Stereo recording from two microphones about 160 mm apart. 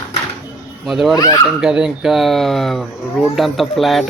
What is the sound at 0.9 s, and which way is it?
Speech, centre (ahead or behind).